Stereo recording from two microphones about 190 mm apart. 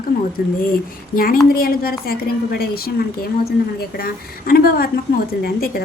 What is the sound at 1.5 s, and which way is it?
A woman's voice, 50° left (ahead or behind).